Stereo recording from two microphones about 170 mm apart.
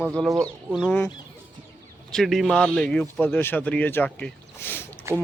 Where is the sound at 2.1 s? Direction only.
Centre (ahead or behind).